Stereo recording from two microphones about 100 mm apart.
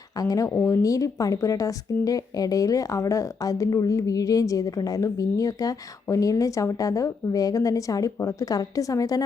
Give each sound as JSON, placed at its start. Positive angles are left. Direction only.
{"t": 0.2, "sound": "speech", "side_deg": 35}